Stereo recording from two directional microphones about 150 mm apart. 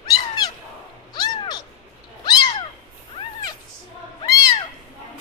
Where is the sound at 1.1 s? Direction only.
30° left (ahead or behind).